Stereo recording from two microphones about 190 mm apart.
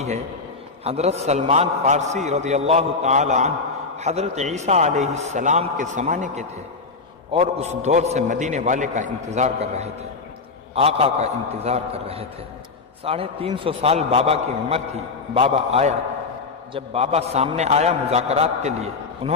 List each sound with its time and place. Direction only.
0.9 s a man's voice: 35° right (ahead or behind)